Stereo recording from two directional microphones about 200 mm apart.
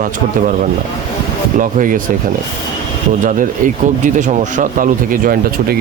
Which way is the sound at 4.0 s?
40° right (ahead or behind).